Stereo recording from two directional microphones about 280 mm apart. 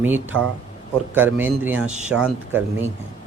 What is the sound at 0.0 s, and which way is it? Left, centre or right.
A man's voice, centre.